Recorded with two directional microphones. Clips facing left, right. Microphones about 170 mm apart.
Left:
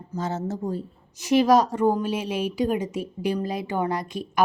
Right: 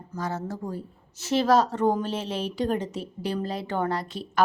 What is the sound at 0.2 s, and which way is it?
A woman's voice, 25° left (ahead or behind).